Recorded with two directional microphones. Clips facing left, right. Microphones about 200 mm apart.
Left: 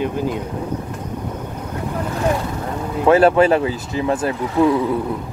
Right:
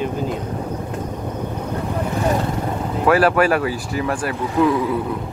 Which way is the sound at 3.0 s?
25° left (ahead or behind).